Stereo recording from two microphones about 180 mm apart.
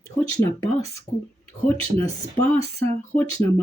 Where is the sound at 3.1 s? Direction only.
45° left (ahead or behind).